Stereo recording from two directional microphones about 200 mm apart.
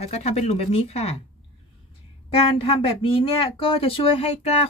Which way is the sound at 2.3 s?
25° left (ahead or behind).